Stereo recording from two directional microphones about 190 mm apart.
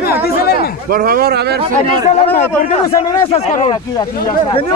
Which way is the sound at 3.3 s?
40° left (ahead or behind).